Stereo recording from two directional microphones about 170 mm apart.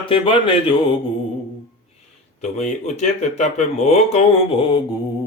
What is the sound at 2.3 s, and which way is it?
Speech, 40° left (ahead or behind).